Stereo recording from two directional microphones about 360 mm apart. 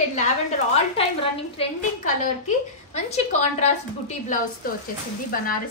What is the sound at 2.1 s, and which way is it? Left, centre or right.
A woman's voice, centre.